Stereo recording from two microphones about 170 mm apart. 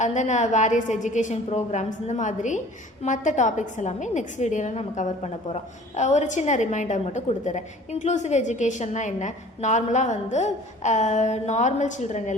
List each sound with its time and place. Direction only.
0.0 s a woman's voice: 45° left (ahead or behind)